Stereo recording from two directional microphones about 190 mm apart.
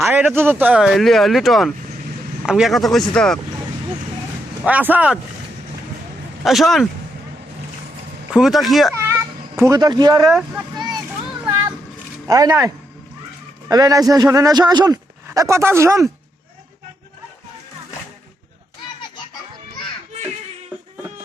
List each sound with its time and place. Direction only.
0.0 s speech: 5° right (ahead or behind)
4.6 s speech: 10° right (ahead or behind)
6.4 s speech: centre (ahead or behind)
8.3 s speech: centre (ahead or behind)
9.0 s cat: 15° right (ahead or behind)
10.2 s speech: 5° right (ahead or behind)
10.8 s a sound: 20° right (ahead or behind)
12.3 s a man's voice: 20° right (ahead or behind)